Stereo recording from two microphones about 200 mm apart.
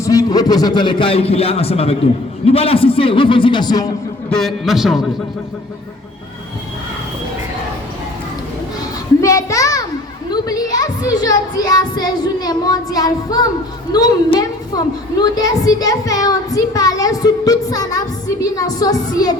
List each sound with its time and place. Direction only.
0.0 s speech: 15° left (ahead or behind)
4.3 s a man's voice: centre (ahead or behind)
9.2 s a child's voice: 15° left (ahead or behind)